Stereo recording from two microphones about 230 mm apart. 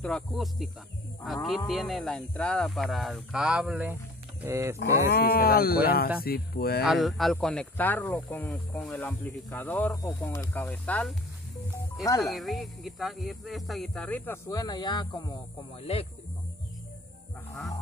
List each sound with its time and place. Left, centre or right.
0.0 s speech: centre
5.1 s speech: left
6.9 s speech: centre
12.2 s speech: centre; by 16.1 s left